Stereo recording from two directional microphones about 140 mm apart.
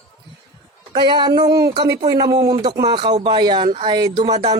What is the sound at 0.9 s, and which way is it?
Speech, 30° right (ahead or behind).